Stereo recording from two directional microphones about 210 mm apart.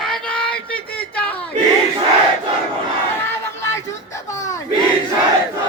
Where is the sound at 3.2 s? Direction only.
10° left (ahead or behind).